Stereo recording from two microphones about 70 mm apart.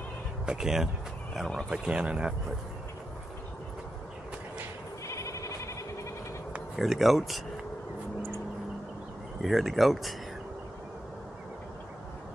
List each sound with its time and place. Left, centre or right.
0.5 s speech: centre
1.7 s speech: centre
5.0 s a sound: left
6.8 s speech: centre
9.4 s speech: centre